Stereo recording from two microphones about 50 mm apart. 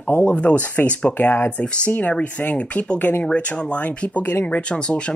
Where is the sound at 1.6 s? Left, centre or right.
Left.